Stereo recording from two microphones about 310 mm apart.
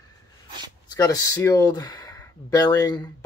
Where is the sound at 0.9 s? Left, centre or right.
Centre.